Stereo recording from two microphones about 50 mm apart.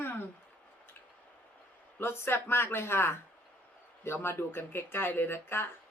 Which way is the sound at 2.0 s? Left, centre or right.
Left.